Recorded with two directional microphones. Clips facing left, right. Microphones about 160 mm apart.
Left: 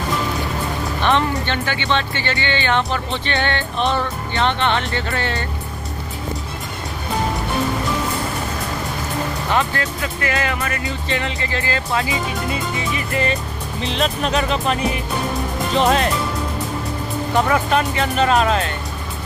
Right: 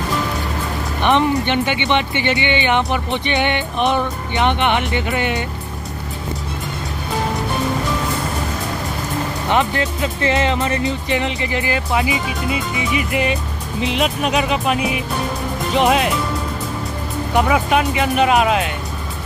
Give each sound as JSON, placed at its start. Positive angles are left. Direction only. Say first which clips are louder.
{"t": 1.0, "sound": "speech", "louder": "right 4 dB", "side_deg": -15}
{"t": 9.5, "sound": "speech", "louder": "right 4 dB", "side_deg": -20}
{"t": 17.3, "sound": "speech", "louder": "right 2 dB", "side_deg": -10}